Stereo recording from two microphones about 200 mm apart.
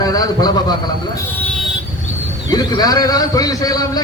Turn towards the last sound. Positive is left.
turn(degrees=20)  # may be behind; listen again after turning